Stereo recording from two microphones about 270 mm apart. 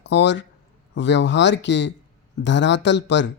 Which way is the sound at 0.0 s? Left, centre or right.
Left.